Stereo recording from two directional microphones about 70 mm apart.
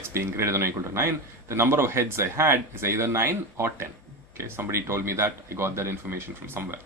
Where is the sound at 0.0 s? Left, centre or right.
Right.